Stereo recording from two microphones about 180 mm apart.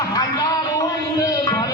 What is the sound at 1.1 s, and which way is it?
Music, 20° left (ahead or behind).